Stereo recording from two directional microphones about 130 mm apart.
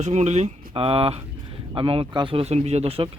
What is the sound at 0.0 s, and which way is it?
Speech, 60° right (ahead or behind).